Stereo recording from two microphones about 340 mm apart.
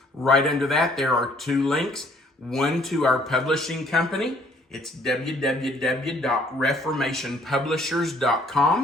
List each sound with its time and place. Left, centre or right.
0.2 s speech: centre